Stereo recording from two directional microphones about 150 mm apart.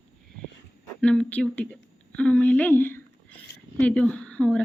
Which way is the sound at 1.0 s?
5° left (ahead or behind).